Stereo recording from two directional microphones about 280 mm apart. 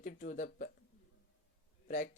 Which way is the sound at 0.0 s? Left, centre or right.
Left.